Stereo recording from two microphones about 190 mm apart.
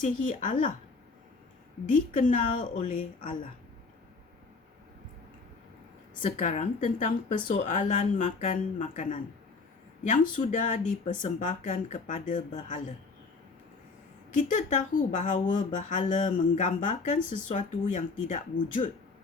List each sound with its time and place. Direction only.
0.0 s speech: 40° left (ahead or behind)
1.9 s a woman's voice: 45° left (ahead or behind)
6.2 s speech: 35° left (ahead or behind)
14.3 s speech: 40° left (ahead or behind)